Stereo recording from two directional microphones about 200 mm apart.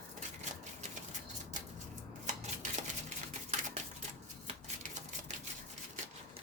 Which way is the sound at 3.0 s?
35° right (ahead or behind).